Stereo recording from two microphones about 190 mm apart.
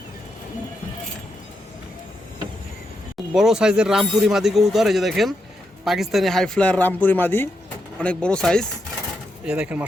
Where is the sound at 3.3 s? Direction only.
5° right (ahead or behind).